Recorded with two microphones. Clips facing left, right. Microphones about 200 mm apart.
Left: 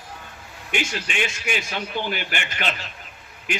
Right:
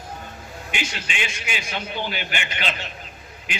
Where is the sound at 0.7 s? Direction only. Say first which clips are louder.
Left 4 dB; 50° left (ahead or behind).